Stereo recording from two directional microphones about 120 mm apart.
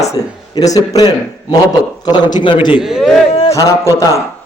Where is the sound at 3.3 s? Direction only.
60° left (ahead or behind).